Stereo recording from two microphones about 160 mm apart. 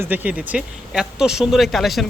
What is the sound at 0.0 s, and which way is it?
Speech, 10° right (ahead or behind).